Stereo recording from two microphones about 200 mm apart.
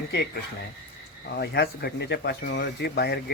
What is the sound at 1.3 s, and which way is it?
Speech, 55° left (ahead or behind).